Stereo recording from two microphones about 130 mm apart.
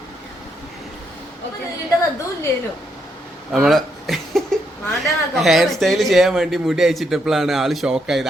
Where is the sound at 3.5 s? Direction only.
Centre (ahead or behind).